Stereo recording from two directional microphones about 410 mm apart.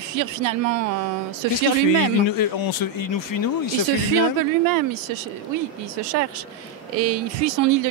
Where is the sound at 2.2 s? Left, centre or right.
Left.